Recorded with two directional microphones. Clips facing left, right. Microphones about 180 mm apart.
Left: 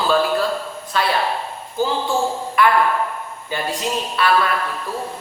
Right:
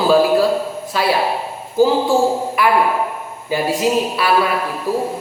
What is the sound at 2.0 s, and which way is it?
Speech, 35° right (ahead or behind).